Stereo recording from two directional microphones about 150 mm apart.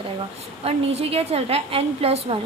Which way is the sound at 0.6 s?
40° right (ahead or behind).